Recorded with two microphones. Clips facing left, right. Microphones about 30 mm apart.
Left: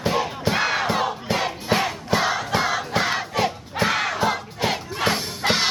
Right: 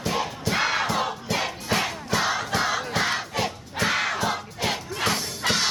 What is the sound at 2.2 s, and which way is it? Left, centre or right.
Crowd, centre.